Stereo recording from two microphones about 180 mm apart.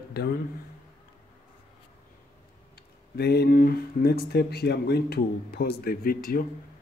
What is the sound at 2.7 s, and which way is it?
Speech, 60° left (ahead or behind).